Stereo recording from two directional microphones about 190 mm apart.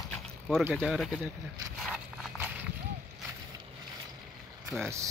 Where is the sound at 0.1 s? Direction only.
5° left (ahead or behind).